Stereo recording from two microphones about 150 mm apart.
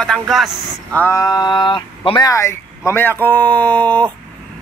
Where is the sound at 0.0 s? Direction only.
5° left (ahead or behind).